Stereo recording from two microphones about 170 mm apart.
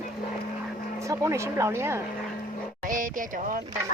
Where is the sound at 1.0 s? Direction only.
20° right (ahead or behind).